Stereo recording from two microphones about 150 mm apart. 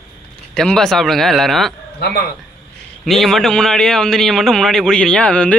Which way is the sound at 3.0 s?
Centre (ahead or behind).